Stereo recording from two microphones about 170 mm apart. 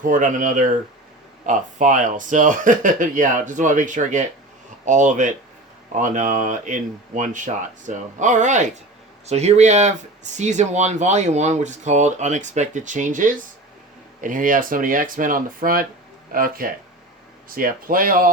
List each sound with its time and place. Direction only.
0.0 s speech: 50° right (ahead or behind)